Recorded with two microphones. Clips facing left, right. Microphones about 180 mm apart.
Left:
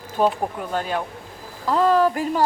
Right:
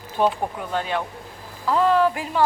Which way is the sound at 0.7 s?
45° left (ahead or behind).